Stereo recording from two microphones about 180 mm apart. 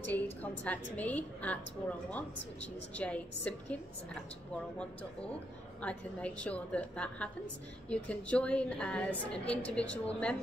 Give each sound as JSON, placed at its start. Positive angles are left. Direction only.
{"t": 0.0, "sound": "a woman's voice", "side_deg": 10}
{"t": 5.8, "sound": "a woman's voice", "side_deg": 5}